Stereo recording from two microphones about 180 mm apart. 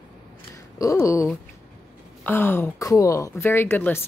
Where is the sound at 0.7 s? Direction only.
15° left (ahead or behind).